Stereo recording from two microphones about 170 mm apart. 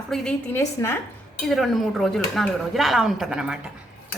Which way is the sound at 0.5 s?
15° left (ahead or behind).